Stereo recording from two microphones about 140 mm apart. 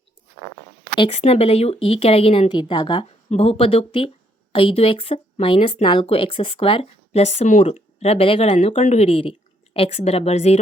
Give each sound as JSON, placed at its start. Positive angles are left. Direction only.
{"t": 1.2, "sound": "a woman's voice", "side_deg": 45}
{"t": 3.2, "sound": "a woman's voice", "side_deg": 45}